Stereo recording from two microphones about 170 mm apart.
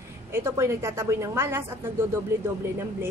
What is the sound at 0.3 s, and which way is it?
A woman's voice, 15° right (ahead or behind).